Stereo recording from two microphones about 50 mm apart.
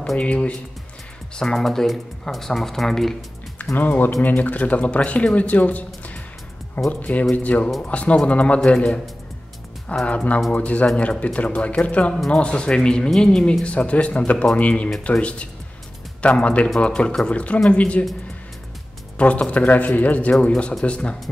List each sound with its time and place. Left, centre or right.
0.2 s speech: left
1.3 s speech: centre
3.7 s speech: left
6.9 s speech: left
10.0 s speech: left
19.1 s speech: left